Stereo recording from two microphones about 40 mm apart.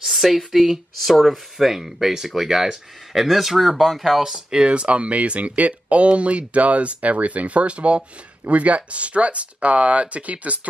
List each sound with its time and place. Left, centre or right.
0.0 s speech: centre
1.1 s speech: centre
1.6 s speech: centre; by 10.7 s right